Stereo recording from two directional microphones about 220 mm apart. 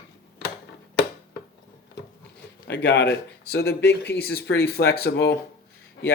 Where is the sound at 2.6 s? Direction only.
50° left (ahead or behind).